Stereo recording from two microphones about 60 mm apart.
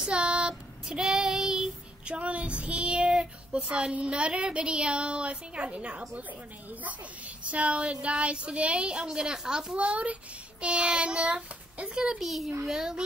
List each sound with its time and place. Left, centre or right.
0.0 s child singing: centre
2.6 s a child's voice: centre
12.2 s a child's voice: centre